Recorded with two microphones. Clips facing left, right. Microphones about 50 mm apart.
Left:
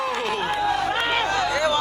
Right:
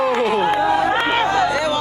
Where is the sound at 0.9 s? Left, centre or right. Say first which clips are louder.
Right 5 dB; right.